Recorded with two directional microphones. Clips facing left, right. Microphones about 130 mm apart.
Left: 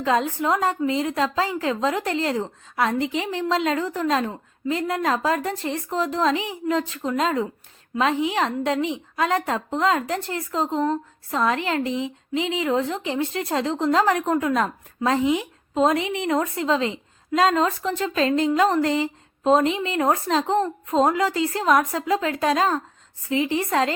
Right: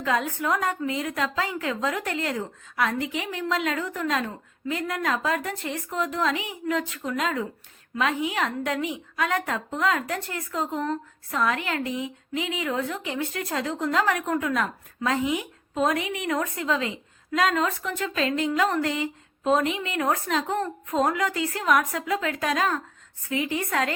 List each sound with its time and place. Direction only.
0.0 s a woman's voice: 25° left (ahead or behind)